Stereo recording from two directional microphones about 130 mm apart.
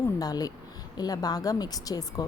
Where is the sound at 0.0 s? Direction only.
30° left (ahead or behind).